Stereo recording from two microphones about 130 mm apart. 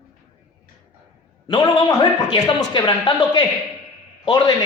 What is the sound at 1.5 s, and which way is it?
A man's voice, 35° left (ahead or behind).